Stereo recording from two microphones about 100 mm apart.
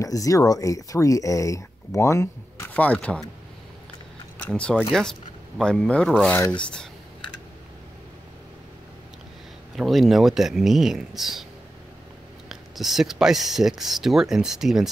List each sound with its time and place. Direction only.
0.0 s speech: 35° left (ahead or behind)
2.7 s speech: 15° left (ahead or behind)
4.5 s speech: 10° left (ahead or behind)
9.8 s speech: centre (ahead or behind)
12.4 s speech: centre (ahead or behind)